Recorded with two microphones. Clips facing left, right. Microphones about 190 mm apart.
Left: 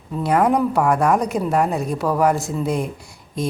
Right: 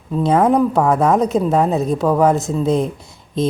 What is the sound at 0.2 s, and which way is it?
Speech, 20° right (ahead or behind).